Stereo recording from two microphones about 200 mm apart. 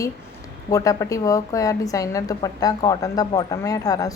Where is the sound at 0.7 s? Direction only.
15° left (ahead or behind).